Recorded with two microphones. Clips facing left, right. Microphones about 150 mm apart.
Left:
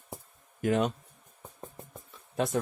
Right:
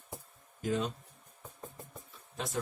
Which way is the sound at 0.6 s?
70° left (ahead or behind).